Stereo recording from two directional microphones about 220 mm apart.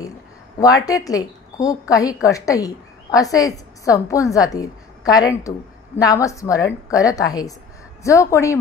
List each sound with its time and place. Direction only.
0.6 s a woman's voice: 15° left (ahead or behind)